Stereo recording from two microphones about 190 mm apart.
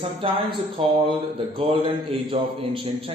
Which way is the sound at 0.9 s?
25° right (ahead or behind).